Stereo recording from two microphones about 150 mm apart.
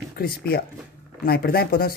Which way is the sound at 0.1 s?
85° left.